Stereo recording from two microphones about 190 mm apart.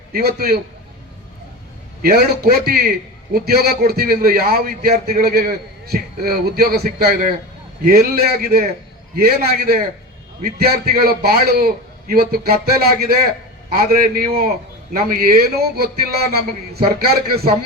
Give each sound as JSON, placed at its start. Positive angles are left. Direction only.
{"t": 0.1, "sound": "a man's voice", "side_deg": -55}
{"t": 2.0, "sound": "a man's voice", "side_deg": -55}